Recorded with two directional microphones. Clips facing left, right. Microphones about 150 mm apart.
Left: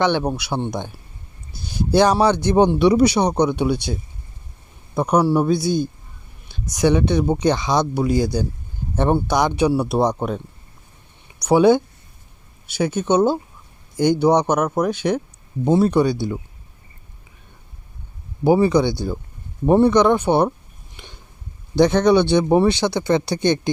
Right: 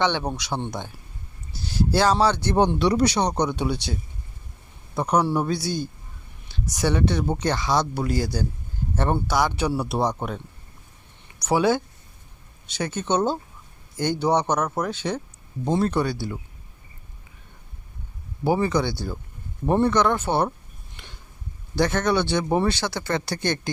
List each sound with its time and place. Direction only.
0.0 s speech: 10° left (ahead or behind)
4.9 s speech: 10° left (ahead or behind)
18.4 s speech: 15° left (ahead or behind)
20.9 s a sound: 15° left (ahead or behind)
21.8 s speech: 20° left (ahead or behind)